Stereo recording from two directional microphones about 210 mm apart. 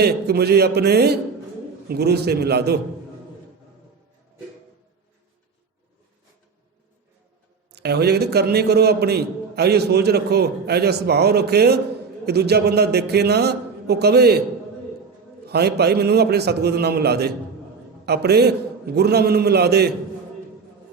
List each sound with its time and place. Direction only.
0.0 s a man's voice: 50° right (ahead or behind)
7.7 s a man's voice: 50° right (ahead or behind)
15.4 s a man's voice: 50° right (ahead or behind)